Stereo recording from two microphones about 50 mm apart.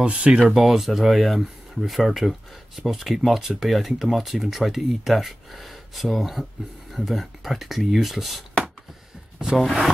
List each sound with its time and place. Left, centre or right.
0.0 s speech: right
0.5 s speech: centre